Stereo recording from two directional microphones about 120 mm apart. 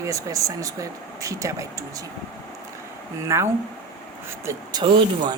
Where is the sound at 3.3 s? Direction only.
25° right (ahead or behind).